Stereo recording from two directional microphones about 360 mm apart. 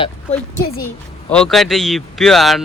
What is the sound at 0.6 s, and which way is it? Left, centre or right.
Speech, left.